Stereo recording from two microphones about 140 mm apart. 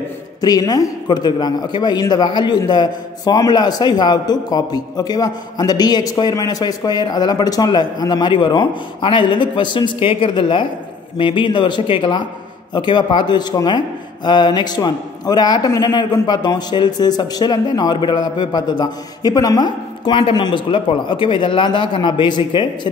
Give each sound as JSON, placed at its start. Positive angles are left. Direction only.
{"t": 0.4, "sound": "a man's voice", "side_deg": 25}